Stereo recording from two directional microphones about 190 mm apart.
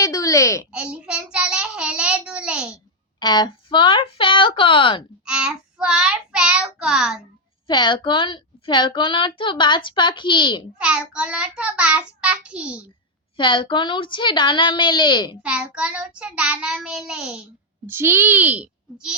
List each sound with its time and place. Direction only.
0.0 s a sound: 15° left (ahead or behind)
0.7 s child singing: 5° right (ahead or behind)
3.2 s a woman's voice: 20° left (ahead or behind)
5.2 s child singing: 5° right (ahead or behind)
7.7 s a woman's voice: 25° left (ahead or behind)
10.8 s child singing: 5° right (ahead or behind)
13.3 s a woman's voice: 25° left (ahead or behind)
15.4 s child singing: 5° right (ahead or behind)
17.8 s a child's voice: 10° right (ahead or behind)